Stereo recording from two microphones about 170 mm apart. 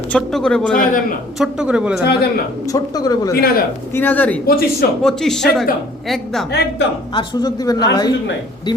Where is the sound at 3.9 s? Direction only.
10° left (ahead or behind).